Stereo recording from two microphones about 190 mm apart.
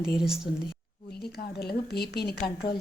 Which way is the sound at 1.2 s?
55° left (ahead or behind).